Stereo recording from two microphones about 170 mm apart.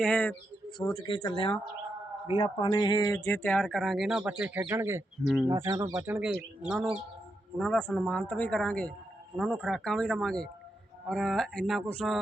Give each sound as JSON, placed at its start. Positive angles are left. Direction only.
{"t": 0.0, "sound": "speech", "side_deg": 5}
{"t": 0.9, "sound": "speech", "side_deg": 25}
{"t": 3.2, "sound": "speech", "side_deg": 10}
{"t": 5.2, "sound": "speech", "side_deg": 0}
{"t": 5.5, "sound": "speech", "side_deg": -15}
{"t": 7.6, "sound": "speech", "side_deg": 5}